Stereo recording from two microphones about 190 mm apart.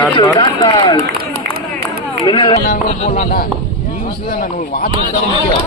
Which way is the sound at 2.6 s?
40° left (ahead or behind).